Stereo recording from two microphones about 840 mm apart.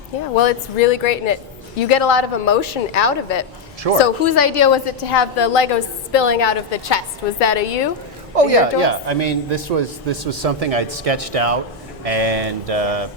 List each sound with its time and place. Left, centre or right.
0.3 s a woman's voice: left
4.0 s a woman's voice: left
8.4 s a man's voice: right